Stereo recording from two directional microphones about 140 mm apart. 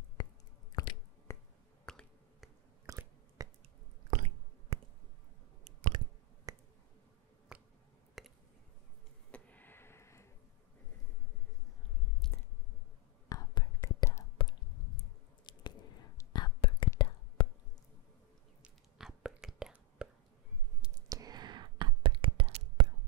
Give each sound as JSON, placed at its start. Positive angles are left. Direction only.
{"t": 0.2, "sound": "chewing", "side_deg": 30}
{"t": 1.9, "sound": "finger snapping", "side_deg": 5}
{"t": 2.9, "sound": "a sound", "side_deg": -25}
{"t": 4.1, "sound": "squish", "side_deg": -55}
{"t": 5.6, "sound": "clicking", "side_deg": -45}
{"t": 6.5, "sound": "a sound", "side_deg": -25}
{"t": 7.5, "sound": "a sound", "side_deg": -5}
{"t": 9.3, "sound": "a sound", "side_deg": 10}
{"t": 13.3, "sound": "whispering", "side_deg": 25}
{"t": 15.5, "sound": "squish", "side_deg": 35}
{"t": 16.2, "sound": "whispering", "side_deg": 30}
{"t": 17.4, "sound": "squish", "side_deg": 35}
{"t": 18.6, "sound": "whispering", "side_deg": -5}
{"t": 21.1, "sound": "whispering", "side_deg": -30}